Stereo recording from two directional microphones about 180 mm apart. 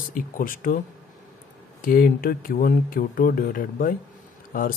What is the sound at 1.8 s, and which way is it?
Speech, 50° left (ahead or behind).